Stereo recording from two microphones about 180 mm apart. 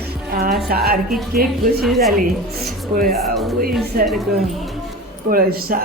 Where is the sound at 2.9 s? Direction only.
55° right (ahead or behind).